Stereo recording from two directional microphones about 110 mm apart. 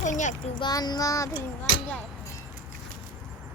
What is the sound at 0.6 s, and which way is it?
Child singing, 40° left (ahead or behind).